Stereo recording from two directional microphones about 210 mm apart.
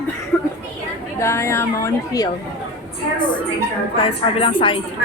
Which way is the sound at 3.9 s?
25° left (ahead or behind).